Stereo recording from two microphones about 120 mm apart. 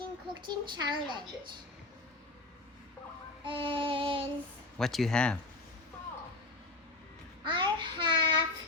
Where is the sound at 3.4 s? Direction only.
45° right (ahead or behind).